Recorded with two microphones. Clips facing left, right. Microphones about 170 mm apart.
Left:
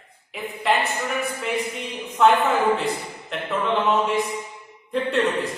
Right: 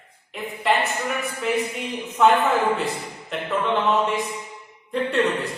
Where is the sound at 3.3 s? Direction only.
Centre (ahead or behind).